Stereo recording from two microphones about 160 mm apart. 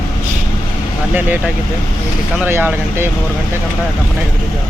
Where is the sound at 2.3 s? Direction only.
10° right (ahead or behind).